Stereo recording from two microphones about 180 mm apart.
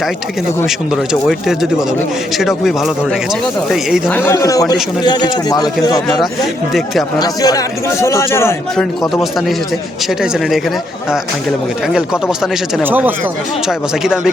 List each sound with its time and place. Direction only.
2.4 s speech: centre (ahead or behind)
4.1 s a man's voice: 15° left (ahead or behind)
8.7 s speech: 5° left (ahead or behind)
12.4 s speech: 5° right (ahead or behind)